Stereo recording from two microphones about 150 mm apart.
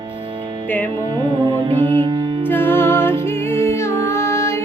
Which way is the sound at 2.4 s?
15° left (ahead or behind).